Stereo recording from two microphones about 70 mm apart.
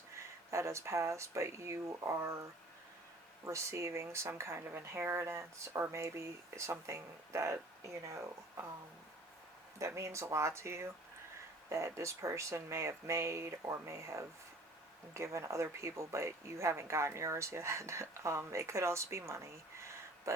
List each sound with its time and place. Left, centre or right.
0.1 s speech: right
9.7 s speech: right